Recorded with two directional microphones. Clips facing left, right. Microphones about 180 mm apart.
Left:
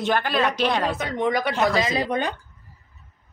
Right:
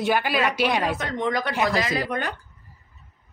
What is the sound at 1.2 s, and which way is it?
Speech, 20° left (ahead or behind).